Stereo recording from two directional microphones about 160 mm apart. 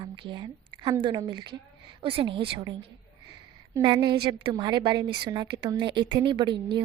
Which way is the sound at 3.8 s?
30° right (ahead or behind).